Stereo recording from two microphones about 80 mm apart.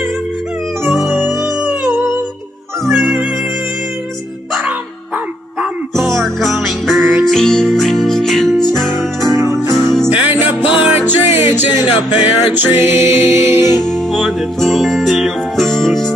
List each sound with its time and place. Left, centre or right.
2.8 s music: centre
7.0 s music: right
7.2 s music: centre
9.2 s music: right
13.8 s music: centre